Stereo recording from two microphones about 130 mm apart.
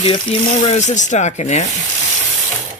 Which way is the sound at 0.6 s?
60° left (ahead or behind).